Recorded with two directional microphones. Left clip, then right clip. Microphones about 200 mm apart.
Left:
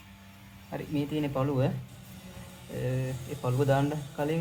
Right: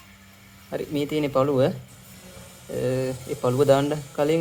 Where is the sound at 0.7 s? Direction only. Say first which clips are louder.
Right 7 dB; 45° right (ahead or behind).